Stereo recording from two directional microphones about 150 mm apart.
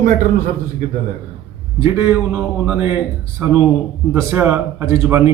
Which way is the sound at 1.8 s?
15° right (ahead or behind).